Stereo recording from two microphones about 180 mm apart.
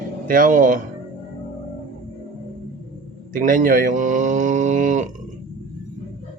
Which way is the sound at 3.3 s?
50° right (ahead or behind).